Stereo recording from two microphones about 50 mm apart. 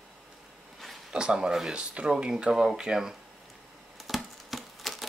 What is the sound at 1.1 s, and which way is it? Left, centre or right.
Speech, centre.